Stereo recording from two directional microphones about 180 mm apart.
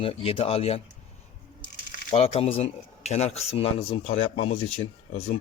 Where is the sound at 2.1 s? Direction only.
30° left (ahead or behind).